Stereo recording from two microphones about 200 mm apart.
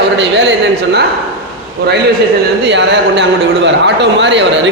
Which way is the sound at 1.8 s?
55° right (ahead or behind).